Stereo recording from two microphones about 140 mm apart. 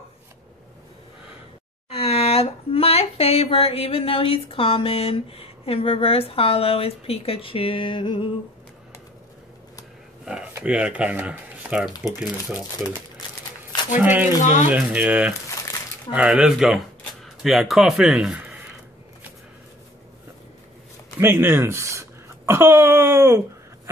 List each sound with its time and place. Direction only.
1.9 s speech: 45° left (ahead or behind)
10.5 s speech: 10° right (ahead or behind)
13.9 s speech: 15° right (ahead or behind)
14.4 s speech: 60° left (ahead or behind)
14.7 s speech: 10° right (ahead or behind)
21.2 s speech: 15° right (ahead or behind)